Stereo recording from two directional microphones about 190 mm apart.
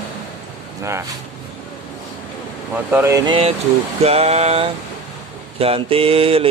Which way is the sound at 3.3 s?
30° right (ahead or behind).